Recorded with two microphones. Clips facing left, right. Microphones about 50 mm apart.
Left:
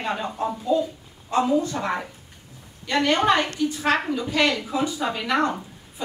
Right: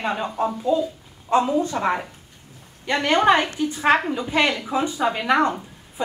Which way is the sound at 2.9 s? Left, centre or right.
Right.